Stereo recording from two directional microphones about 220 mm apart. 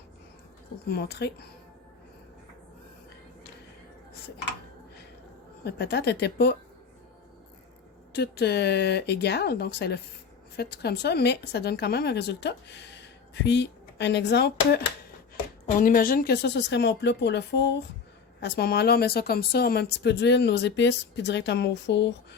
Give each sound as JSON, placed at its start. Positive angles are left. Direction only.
{"t": 0.9, "sound": "speech", "side_deg": 50}
{"t": 5.6, "sound": "speech", "side_deg": 50}
{"t": 8.1, "sound": "speech", "side_deg": 50}